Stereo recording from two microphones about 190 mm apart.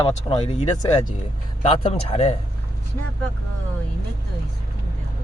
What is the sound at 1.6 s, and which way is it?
Speech, 35° left (ahead or behind).